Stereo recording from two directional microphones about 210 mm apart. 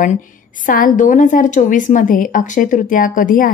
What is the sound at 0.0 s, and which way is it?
A woman's voice, 40° left (ahead or behind).